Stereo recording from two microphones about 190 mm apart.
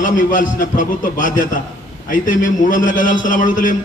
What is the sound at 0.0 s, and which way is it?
A man's voice, 45° left (ahead or behind).